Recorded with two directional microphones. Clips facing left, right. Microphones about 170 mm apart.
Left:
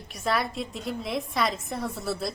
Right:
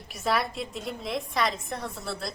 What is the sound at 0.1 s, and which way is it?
A woman's voice, centre (ahead or behind).